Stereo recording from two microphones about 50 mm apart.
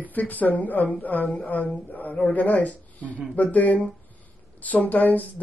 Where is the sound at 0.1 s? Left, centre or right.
Left.